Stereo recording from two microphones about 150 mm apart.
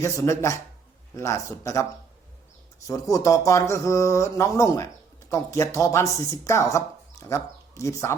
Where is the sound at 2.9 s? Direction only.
20° left (ahead or behind).